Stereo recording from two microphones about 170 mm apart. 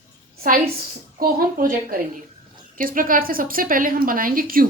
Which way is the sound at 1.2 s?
55° right (ahead or behind).